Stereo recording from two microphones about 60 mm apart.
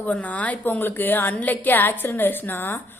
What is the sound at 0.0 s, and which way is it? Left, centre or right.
A woman's voice, left.